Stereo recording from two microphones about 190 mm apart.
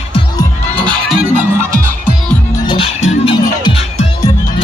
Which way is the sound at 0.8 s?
5° left (ahead or behind).